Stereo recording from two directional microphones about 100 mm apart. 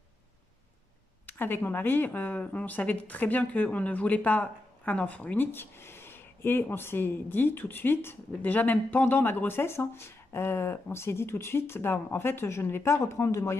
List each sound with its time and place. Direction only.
1.2 s speech: 20° left (ahead or behind)